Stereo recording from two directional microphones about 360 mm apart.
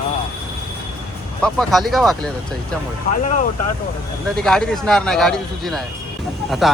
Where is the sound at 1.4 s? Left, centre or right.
Centre.